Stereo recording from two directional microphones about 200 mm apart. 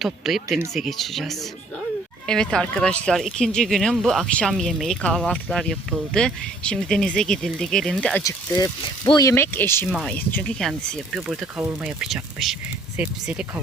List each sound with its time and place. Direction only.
0.0 s speech: centre (ahead or behind)
8.2 s speech: 15° left (ahead or behind); by 13.4 s 5° right (ahead or behind)